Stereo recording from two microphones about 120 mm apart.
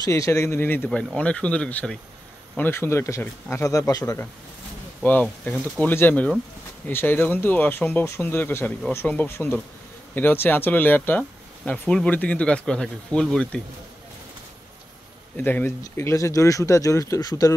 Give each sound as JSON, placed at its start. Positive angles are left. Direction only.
{"t": 0.0, "sound": "speech", "side_deg": 25}
{"t": 5.0, "sound": "speech", "side_deg": 15}
{"t": 15.3, "sound": "speech", "side_deg": 15}